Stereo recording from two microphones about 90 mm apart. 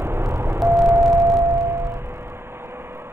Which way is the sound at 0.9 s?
30° right (ahead or behind).